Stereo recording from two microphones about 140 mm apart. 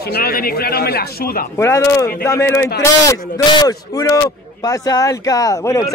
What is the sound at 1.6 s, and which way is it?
A man's voice, 20° left (ahead or behind).